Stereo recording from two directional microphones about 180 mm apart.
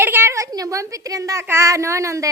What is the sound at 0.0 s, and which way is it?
A woman's voice, 10° right (ahead or behind).